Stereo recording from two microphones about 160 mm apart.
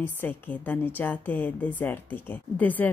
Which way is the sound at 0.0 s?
10° left (ahead or behind).